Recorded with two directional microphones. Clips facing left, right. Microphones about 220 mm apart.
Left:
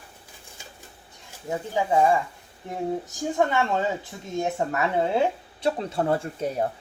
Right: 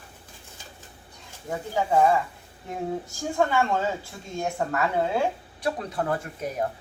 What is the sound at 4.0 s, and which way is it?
Speech, 20° left (ahead or behind).